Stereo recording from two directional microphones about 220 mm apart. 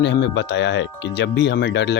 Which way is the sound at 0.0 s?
50° left (ahead or behind).